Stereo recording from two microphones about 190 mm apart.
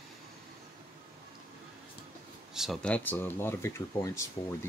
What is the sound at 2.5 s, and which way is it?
Speech, centre (ahead or behind).